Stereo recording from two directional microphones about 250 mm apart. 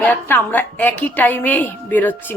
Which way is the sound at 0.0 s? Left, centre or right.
Centre.